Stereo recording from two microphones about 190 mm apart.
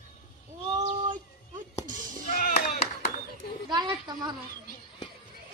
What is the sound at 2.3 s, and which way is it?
Clapping, 45° left (ahead or behind).